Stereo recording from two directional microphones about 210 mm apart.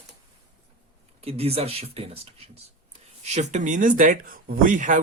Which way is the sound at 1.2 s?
30° right (ahead or behind).